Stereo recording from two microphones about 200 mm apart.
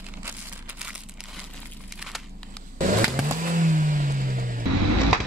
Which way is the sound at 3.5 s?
40° right (ahead or behind).